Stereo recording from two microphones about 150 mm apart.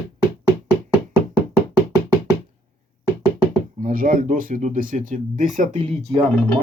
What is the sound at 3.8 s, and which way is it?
Speech, 60° right (ahead or behind).